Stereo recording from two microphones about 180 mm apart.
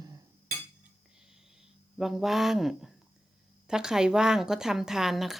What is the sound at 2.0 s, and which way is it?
A woman's voice, centre (ahead or behind).